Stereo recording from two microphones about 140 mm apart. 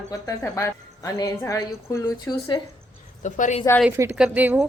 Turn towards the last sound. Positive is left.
turn(degrees=-15)  # may be behind; listen again after turning